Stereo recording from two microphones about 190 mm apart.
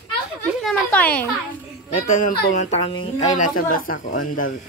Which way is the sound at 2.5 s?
35° left (ahead or behind).